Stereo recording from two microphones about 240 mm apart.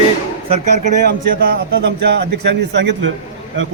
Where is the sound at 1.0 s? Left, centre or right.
Right.